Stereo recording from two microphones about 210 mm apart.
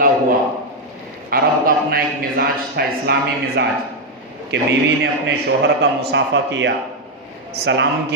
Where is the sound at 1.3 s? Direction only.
45° right (ahead or behind).